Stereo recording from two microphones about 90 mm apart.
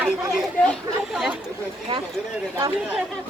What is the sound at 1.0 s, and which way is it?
Speech, 5° right (ahead or behind).